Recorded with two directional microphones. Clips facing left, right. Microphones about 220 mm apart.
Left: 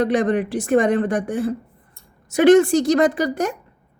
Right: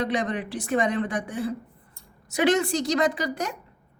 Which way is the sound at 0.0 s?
50° left (ahead or behind).